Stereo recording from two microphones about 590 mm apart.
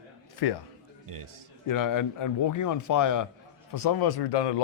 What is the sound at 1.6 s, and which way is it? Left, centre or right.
Speech, left.